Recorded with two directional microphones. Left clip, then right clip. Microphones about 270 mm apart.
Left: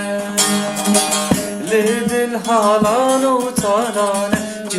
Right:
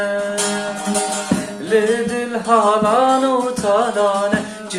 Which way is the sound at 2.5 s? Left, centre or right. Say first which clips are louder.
Right 1 dB; left.